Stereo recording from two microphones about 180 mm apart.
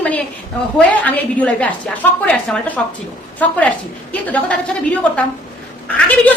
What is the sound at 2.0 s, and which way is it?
A woman's voice, 10° left (ahead or behind).